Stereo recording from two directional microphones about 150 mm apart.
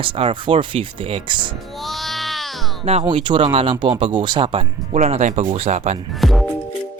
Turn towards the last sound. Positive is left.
turn(degrees=0)  # may be behind; listen again after turning